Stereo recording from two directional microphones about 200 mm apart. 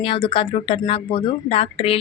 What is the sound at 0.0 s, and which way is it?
Speech, 25° left (ahead or behind).